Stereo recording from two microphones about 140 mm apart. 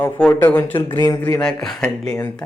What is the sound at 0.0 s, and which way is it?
A man's voice, 10° left (ahead or behind).